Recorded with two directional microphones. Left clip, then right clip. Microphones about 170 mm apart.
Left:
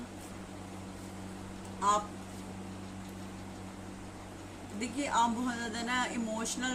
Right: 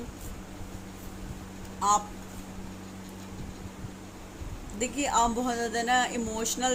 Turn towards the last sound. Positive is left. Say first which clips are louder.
# right 6 dB
turn(degrees=-40)  # may be behind; listen again after turning